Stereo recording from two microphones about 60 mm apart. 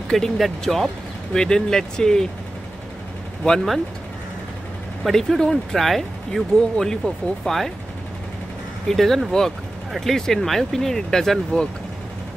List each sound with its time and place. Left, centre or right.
0.1 s speech: centre
3.4 s speech: centre
5.0 s speech: centre
8.8 s speech: centre